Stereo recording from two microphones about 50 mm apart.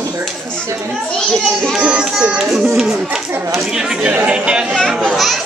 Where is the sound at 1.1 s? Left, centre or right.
Centre.